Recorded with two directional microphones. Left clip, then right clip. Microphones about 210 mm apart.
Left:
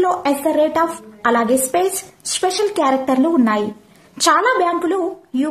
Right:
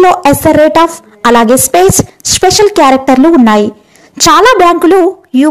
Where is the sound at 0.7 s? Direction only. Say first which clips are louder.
Right 11 dB; 40° right (ahead or behind).